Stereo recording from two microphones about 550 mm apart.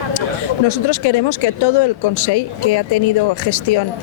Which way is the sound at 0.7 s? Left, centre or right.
Left.